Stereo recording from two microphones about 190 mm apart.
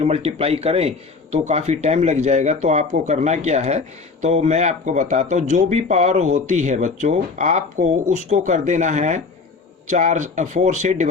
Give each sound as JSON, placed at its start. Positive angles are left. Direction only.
{"t": 0.0, "sound": "speech", "side_deg": -30}